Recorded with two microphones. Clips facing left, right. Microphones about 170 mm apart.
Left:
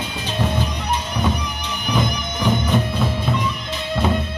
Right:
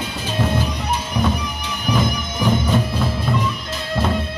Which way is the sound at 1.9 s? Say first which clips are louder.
Right 2 dB; 5° right (ahead or behind).